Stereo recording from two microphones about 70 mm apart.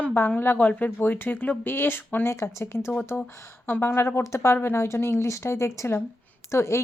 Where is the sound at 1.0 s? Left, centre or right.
Left.